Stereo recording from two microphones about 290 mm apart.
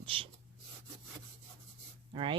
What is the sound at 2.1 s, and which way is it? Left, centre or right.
Speech, centre.